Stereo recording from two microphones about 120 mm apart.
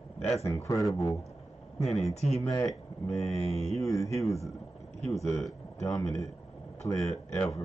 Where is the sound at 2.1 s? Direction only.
65° left (ahead or behind).